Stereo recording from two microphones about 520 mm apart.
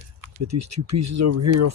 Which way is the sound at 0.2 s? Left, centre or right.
Right.